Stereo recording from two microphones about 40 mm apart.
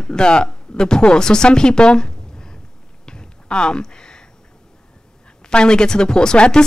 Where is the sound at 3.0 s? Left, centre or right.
Left.